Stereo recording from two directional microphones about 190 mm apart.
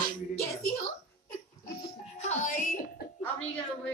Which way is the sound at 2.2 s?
40° left (ahead or behind).